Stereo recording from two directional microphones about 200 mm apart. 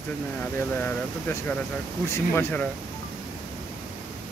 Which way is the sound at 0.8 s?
10° left (ahead or behind).